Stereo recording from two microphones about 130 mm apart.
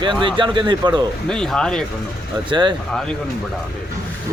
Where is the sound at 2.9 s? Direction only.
5° left (ahead or behind).